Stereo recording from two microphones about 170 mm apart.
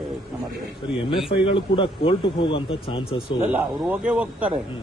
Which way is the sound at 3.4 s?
10° right (ahead or behind).